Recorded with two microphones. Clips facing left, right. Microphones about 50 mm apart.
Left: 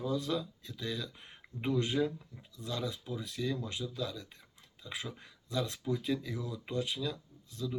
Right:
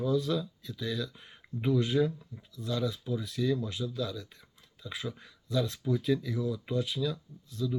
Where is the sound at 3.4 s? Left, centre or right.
Centre.